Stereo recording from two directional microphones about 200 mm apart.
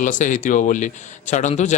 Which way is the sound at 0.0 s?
40° left (ahead or behind).